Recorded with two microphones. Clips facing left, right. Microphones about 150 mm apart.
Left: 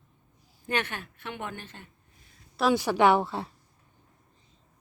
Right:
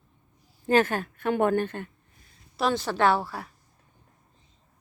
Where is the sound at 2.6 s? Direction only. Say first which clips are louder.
Left 2 dB; 5° left (ahead or behind); by 3.5 s 25° left (ahead or behind).